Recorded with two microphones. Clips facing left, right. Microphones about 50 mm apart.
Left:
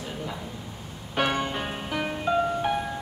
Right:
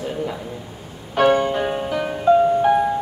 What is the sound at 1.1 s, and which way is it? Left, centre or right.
Music, centre.